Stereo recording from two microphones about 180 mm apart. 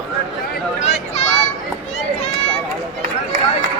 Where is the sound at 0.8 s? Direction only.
35° left (ahead or behind).